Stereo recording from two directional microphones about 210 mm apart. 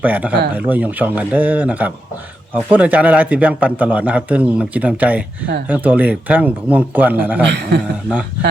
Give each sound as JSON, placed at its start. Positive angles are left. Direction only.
{"t": 0.0, "sound": "a man's voice", "side_deg": -5}
{"t": 7.4, "sound": "a man's voice", "side_deg": -55}